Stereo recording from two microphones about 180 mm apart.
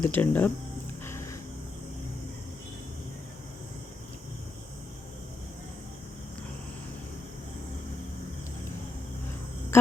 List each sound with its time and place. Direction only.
0.0 s speech: 10° left (ahead or behind)
1.0 s music: 15° left (ahead or behind)
9.7 s a sound: 15° left (ahead or behind)